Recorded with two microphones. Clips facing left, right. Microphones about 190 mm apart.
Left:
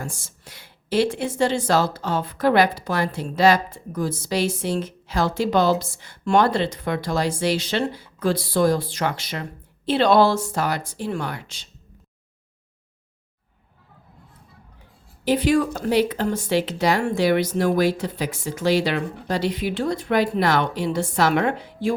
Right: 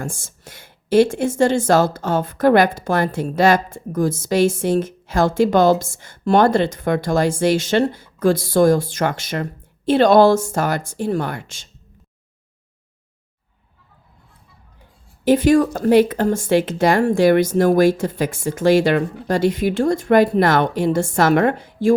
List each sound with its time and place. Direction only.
0.0 s speech: 50° right (ahead or behind)
15.2 s speech: 50° right (ahead or behind)